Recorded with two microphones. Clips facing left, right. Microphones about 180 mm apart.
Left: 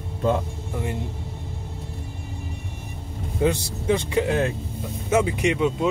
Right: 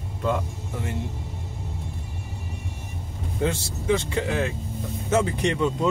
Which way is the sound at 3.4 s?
20° left (ahead or behind).